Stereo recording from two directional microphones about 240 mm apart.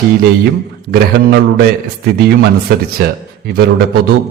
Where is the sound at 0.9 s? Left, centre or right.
Right.